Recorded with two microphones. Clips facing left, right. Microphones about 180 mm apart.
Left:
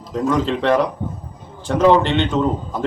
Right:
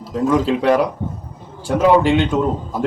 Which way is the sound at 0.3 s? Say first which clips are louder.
Right 2 dB; 5° right (ahead or behind).